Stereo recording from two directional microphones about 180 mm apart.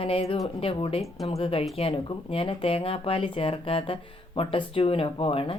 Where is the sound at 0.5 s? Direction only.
30° left (ahead or behind).